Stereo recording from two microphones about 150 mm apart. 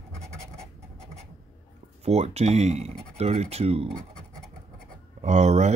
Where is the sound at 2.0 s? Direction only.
45° right (ahead or behind).